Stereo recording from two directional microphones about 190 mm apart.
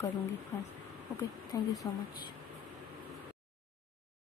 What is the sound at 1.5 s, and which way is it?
Speech, 20° left (ahead or behind).